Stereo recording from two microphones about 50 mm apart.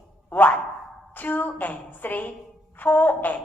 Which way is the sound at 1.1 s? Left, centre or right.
Left.